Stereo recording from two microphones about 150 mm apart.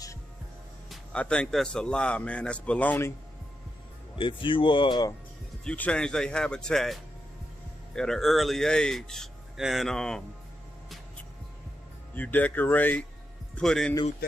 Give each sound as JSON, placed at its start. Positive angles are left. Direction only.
{"t": 0.8, "sound": "speech", "side_deg": 5}
{"t": 4.2, "sound": "speech", "side_deg": 35}
{"t": 5.6, "sound": "speech", "side_deg": 5}
{"t": 12.2, "sound": "speech", "side_deg": 10}